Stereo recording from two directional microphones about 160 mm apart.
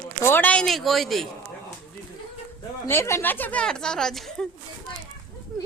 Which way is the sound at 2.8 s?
15° left (ahead or behind).